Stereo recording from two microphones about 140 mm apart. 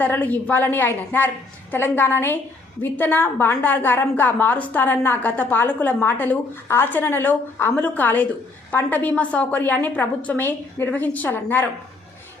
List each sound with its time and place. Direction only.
0.0 s a woman's voice: 10° left (ahead or behind)